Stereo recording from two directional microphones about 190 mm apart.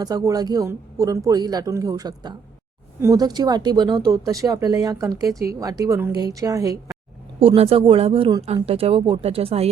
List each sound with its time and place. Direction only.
0.0 s speech: 20° right (ahead or behind)
7.3 s speech: 30° right (ahead or behind)